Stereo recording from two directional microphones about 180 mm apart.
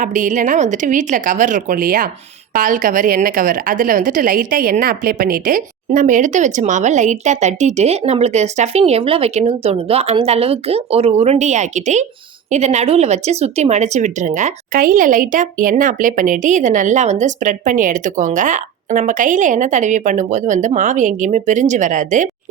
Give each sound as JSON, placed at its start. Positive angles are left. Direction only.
{"t": 0.0, "sound": "a woman's voice", "side_deg": -45}